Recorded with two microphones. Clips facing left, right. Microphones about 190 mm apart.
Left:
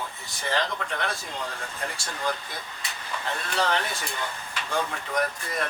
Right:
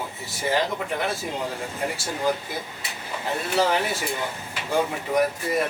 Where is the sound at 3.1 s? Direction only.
20° right (ahead or behind).